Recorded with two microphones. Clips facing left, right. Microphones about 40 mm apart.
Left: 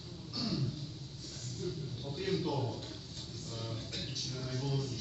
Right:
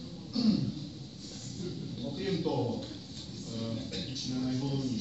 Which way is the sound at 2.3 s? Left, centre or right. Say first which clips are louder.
Right 4 dB; centre.